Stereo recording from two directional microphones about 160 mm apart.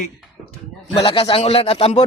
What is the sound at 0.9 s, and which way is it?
Speech, 35° left (ahead or behind).